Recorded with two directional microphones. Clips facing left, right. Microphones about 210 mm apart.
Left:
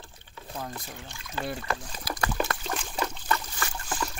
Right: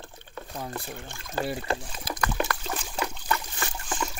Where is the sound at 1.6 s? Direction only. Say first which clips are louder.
Right 3 dB; 25° right (ahead or behind).